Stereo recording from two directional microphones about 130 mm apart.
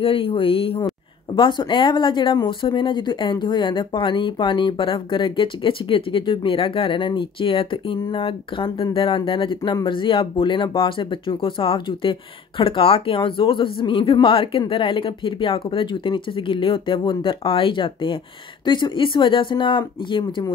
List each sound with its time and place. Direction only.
0.0 s speech: 45° left (ahead or behind)
1.3 s speech: 35° left (ahead or behind)